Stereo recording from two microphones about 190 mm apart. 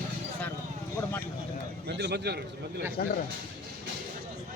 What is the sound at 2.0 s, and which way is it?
Speech, 60° right (ahead or behind).